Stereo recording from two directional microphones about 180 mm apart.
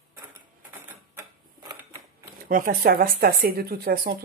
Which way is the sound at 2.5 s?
50° right (ahead or behind).